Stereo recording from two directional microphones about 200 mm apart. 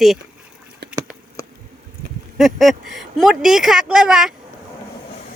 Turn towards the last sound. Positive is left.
turn(degrees=-5)  # may be behind; listen again after turning